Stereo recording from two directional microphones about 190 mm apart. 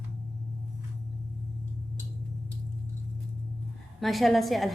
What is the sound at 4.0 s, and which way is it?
Speech, centre (ahead or behind).